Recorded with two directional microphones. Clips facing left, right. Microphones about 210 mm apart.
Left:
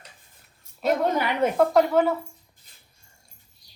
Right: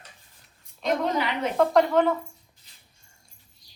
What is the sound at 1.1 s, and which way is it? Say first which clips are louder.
Speech: left 4 dB; 50° left (ahead or behind).